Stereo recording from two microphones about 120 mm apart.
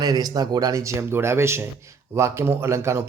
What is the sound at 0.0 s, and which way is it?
Speech, 30° right (ahead or behind).